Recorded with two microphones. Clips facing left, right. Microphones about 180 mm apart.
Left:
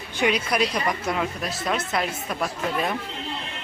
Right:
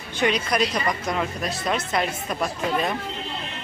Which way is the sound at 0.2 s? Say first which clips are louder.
Even; 5° left (ahead or behind).